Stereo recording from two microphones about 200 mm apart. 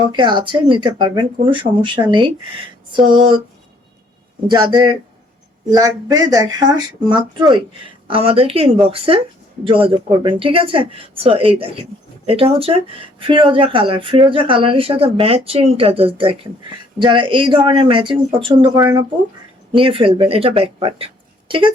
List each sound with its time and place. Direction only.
0.1 s speech: 25° right (ahead or behind)
4.4 s speech: 20° right (ahead or behind)